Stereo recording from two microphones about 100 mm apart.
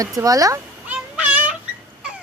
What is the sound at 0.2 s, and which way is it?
Speech, 35° right (ahead or behind).